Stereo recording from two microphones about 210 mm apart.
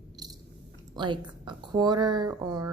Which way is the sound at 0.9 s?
20° right (ahead or behind).